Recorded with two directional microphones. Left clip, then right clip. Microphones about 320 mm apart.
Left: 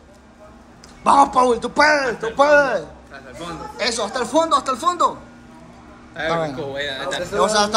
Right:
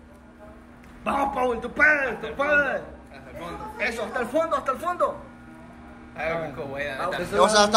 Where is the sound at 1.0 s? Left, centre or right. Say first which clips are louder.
Left 10 dB; centre.